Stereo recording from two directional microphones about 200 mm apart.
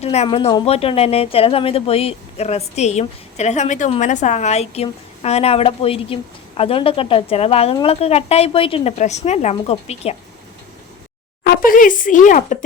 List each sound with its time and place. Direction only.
0.0 s a woman's voice: 30° left (ahead or behind)
11.4 s speech: 45° left (ahead or behind)